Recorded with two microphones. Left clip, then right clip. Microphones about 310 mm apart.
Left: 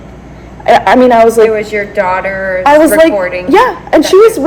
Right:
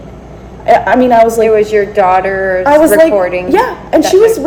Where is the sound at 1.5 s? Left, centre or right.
Right.